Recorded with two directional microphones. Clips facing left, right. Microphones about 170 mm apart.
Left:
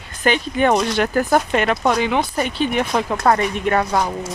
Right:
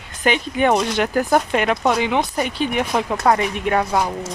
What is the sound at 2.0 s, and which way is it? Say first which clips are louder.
Speech: even; 15° right (ahead or behind).